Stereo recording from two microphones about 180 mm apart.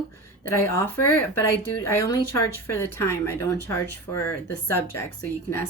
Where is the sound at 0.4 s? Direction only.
15° left (ahead or behind).